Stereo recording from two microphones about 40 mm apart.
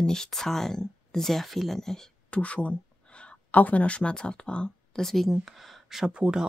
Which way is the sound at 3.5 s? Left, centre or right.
Left.